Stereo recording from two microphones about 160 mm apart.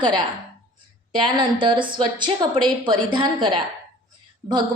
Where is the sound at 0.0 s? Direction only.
25° right (ahead or behind).